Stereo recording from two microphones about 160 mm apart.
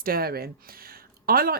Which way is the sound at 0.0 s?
70° right (ahead or behind).